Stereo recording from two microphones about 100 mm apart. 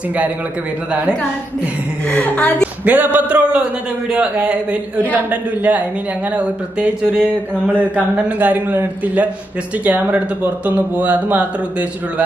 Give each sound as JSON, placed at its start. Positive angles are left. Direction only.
{"t": 2.0, "sound": "a woman's voice", "side_deg": 15}
{"t": 2.8, "sound": "speech", "side_deg": -15}